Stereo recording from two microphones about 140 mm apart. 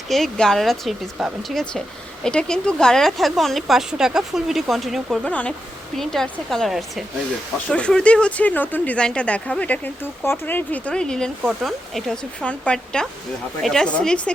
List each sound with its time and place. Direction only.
0.1 s a woman's voice: 5° left (ahead or behind)
5.2 s a woman's voice: 10° left (ahead or behind)